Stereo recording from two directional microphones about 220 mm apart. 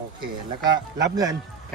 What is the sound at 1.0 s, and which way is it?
Speech, 15° right (ahead or behind).